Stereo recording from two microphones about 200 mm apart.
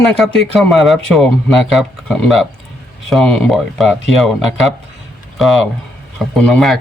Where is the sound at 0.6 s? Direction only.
Centre (ahead or behind).